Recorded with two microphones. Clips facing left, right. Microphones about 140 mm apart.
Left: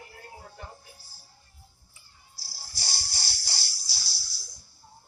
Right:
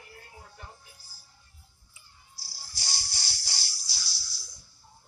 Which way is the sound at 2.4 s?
35° left (ahead or behind).